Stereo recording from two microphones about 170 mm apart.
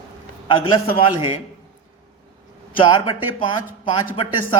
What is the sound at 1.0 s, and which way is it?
Speech, 30° left (ahead or behind).